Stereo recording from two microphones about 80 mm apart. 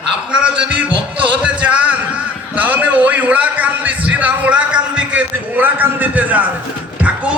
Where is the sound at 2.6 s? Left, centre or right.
Right.